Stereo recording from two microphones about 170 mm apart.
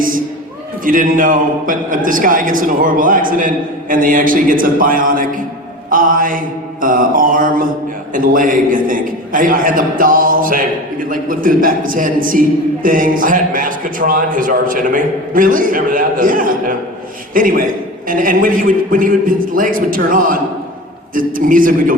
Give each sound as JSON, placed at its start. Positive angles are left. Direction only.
{"t": 0.9, "sound": "a man's voice", "side_deg": -55}